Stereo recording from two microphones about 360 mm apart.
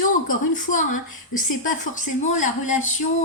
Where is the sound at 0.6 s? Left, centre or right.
Left.